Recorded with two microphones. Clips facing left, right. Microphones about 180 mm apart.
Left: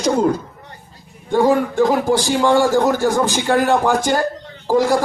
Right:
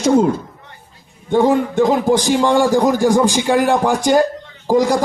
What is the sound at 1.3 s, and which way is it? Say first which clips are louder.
A man's voice: right 1 dB; 20° right (ahead or behind).